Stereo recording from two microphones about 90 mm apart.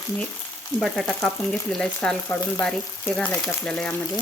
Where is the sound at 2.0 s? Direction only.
15° left (ahead or behind).